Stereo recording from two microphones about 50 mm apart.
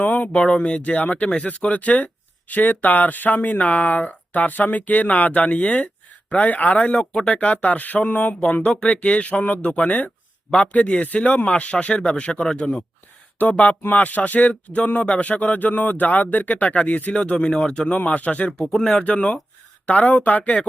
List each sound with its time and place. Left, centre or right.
0.0 s a sound: left
0.3 s speech: left
7.0 s speech: centre
7.4 s speech: left
8.6 s speech: centre
8.9 s speech: left
17.2 s speech: left